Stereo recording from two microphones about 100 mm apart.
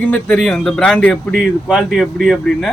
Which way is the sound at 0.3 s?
5° left (ahead or behind).